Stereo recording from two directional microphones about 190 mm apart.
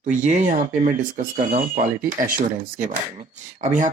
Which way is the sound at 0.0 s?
40° right (ahead or behind).